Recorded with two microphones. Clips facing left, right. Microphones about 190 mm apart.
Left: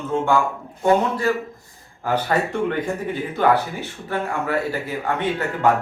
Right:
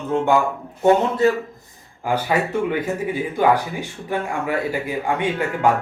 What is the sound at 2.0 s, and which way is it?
Speech, 10° right (ahead or behind).